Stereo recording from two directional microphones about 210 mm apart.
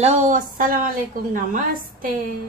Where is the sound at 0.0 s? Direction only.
35° right (ahead or behind).